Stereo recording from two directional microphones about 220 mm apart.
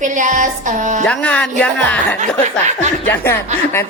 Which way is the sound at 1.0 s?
5° left (ahead or behind).